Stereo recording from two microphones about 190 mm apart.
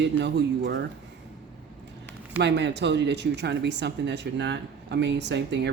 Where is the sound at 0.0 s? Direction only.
65° right (ahead or behind).